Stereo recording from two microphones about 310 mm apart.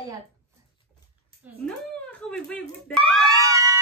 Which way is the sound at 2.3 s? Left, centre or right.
Centre.